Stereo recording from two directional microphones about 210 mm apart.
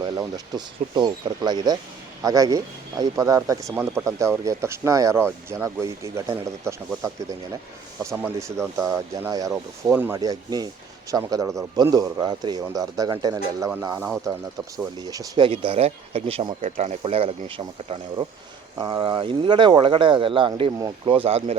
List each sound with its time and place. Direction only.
0.0 s speech: 20° right (ahead or behind)
8.1 s speech: 10° right (ahead or behind); by 21.6 s 30° right (ahead or behind)